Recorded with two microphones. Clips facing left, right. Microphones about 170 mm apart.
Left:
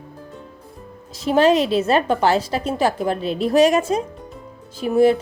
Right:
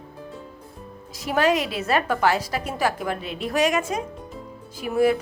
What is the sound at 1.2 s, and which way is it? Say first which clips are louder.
A woman's voice: left 6 dB; 25° left (ahead or behind).